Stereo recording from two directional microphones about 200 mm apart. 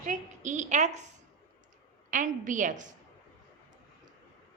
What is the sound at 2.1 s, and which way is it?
Speech, 40° right (ahead or behind).